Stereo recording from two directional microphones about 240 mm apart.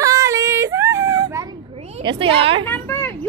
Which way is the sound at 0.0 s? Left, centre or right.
Centre.